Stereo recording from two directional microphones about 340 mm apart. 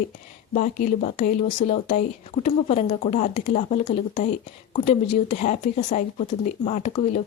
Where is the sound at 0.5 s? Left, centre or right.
Left.